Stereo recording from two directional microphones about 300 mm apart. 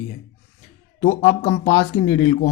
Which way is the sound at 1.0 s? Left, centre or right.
Left.